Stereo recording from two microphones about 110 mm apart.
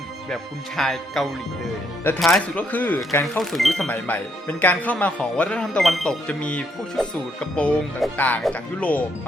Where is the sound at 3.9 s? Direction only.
15° left (ahead or behind).